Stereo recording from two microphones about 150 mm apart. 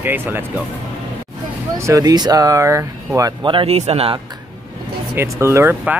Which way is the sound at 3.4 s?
40° right (ahead or behind).